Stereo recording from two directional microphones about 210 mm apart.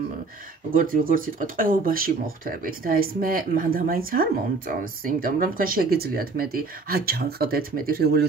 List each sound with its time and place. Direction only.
0.7 s speech: 40° right (ahead or behind)